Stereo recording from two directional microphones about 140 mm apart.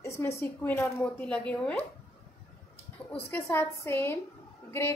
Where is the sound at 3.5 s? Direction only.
15° left (ahead or behind).